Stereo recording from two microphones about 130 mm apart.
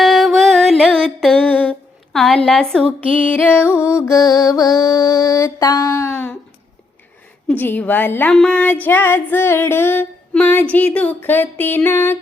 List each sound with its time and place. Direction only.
0.0 s a sound: centre (ahead or behind)
2.1 s music: 5° left (ahead or behind)
3.9 s mantra: 25° left (ahead or behind)
7.4 s music: 15° left (ahead or behind)